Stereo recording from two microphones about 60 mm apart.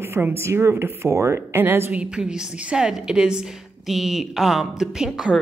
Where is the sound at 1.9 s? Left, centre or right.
Centre.